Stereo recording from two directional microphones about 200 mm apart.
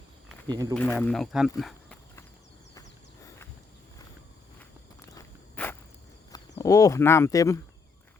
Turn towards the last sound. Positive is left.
turn(degrees=15)  # may be behind; listen again after turning